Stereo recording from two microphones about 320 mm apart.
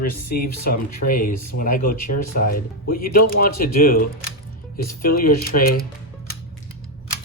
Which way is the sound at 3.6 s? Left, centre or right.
Left.